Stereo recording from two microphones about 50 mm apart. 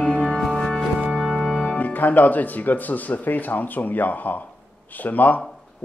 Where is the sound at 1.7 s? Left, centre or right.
Left.